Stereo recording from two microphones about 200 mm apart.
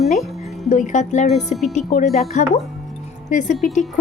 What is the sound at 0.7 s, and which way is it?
A woman's voice, 40° left (ahead or behind).